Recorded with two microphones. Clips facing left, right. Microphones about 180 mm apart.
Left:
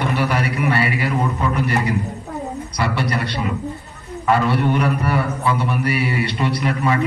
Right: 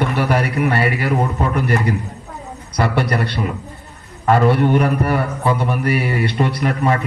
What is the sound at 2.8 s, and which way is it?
A man's voice, 50° right (ahead or behind).